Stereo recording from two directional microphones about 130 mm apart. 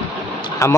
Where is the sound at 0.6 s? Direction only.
20° left (ahead or behind).